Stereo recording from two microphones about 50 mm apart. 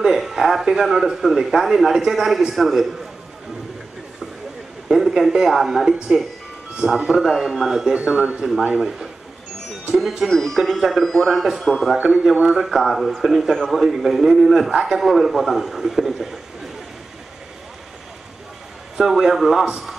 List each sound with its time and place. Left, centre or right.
0.0 s a sound: centre
0.6 s a man's voice: centre
4.8 s a man's voice: centre
7.9 s a man's voice: centre
10.3 s a man's voice: centre
11.7 s a man's voice: centre
12.7 s a man's voice: centre
18.9 s a man's voice: centre